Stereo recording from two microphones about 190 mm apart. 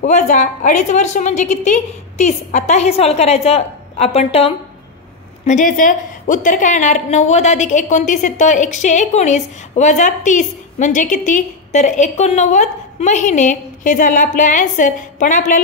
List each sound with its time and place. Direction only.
0.0 s a woman's voice: 40° left (ahead or behind)